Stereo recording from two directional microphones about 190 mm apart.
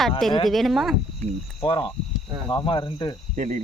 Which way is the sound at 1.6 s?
30° left (ahead or behind).